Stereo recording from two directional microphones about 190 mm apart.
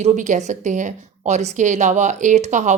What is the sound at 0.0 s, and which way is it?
A woman's voice, 40° right (ahead or behind).